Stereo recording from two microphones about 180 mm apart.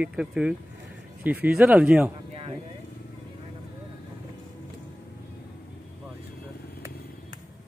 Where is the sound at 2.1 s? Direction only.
30° right (ahead or behind).